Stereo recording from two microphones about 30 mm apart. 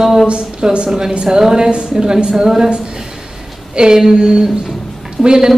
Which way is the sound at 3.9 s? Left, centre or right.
Centre.